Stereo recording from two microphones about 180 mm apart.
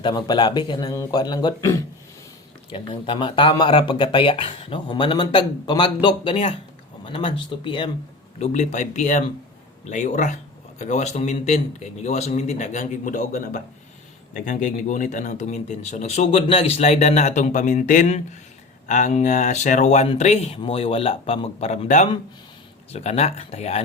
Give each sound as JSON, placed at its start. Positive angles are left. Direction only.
{"t": 0.0, "sound": "speech", "side_deg": 25}
{"t": 8.4, "sound": "speech", "side_deg": 40}